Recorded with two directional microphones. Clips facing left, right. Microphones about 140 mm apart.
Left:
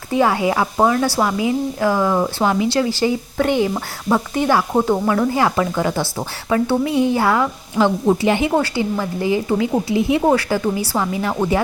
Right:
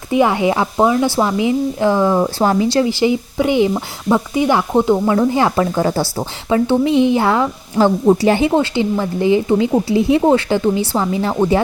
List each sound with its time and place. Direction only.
0.1 s speech: 20° right (ahead or behind)
2.9 s speech: 15° right (ahead or behind)